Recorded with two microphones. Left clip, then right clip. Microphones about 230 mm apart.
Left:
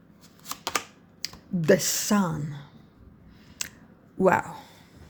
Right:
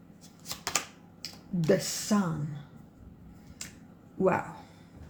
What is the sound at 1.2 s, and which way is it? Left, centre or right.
Speech, left.